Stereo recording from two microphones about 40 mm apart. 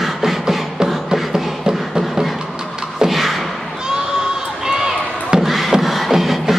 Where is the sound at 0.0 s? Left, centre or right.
Centre.